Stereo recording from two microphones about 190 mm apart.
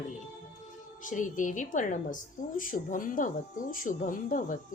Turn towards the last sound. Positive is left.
turn(degrees=45)  # may be behind; listen again after turning